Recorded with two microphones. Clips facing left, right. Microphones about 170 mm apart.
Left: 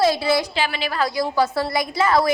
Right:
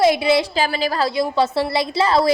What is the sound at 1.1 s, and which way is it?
A woman's voice, 25° right (ahead or behind).